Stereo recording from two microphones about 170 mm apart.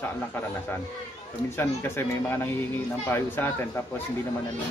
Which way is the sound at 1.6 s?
15° left (ahead or behind).